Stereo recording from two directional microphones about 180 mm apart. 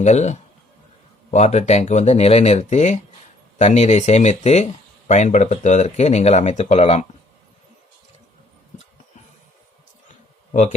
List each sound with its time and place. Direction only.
0.0 s speech: 40° left (ahead or behind)
10.5 s speech: 40° left (ahead or behind)